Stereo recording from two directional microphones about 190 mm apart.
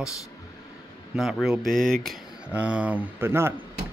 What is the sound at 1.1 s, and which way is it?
Speech, centre (ahead or behind).